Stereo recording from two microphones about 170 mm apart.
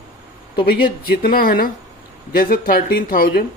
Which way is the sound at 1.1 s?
60° left (ahead or behind).